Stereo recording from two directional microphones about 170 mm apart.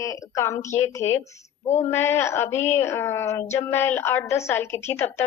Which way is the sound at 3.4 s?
40° left (ahead or behind).